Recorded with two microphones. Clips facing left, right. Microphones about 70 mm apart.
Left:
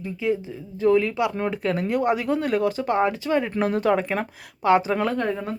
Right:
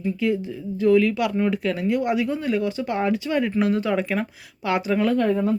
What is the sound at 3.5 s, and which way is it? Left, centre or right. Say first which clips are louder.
Speech: even; left.